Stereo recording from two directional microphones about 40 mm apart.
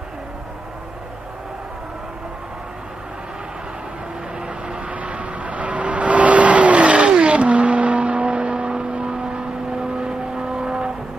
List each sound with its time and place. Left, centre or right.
4.8 s vehicle: right; by 10.9 s centre